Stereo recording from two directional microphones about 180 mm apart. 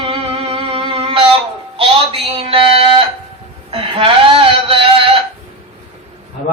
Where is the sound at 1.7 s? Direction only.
30° right (ahead or behind).